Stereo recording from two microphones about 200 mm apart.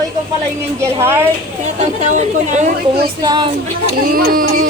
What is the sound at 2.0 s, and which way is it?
Speech, 35° right (ahead or behind).